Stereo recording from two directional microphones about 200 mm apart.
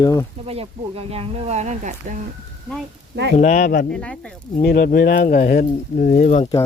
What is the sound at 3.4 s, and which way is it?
Speech, 40° left (ahead or behind).